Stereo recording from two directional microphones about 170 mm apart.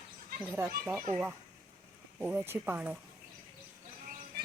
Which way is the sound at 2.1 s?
10° right (ahead or behind).